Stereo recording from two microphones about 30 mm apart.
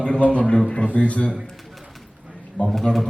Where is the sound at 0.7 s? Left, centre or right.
Left.